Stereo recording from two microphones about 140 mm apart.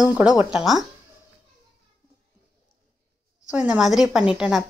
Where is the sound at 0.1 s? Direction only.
10° right (ahead or behind).